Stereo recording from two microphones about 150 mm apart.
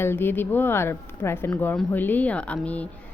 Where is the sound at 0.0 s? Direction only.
15° left (ahead or behind).